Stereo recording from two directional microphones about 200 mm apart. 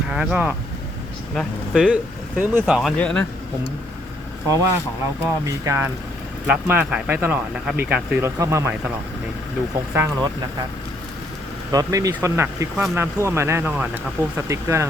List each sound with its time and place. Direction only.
0.1 s speech: 5° right (ahead or behind)
5.2 s speech: 15° right (ahead or behind)
9.9 s speech: 10° right (ahead or behind)
11.7 s speech: 20° right (ahead or behind)